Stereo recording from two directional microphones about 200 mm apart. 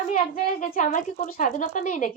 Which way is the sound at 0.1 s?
40° left (ahead or behind).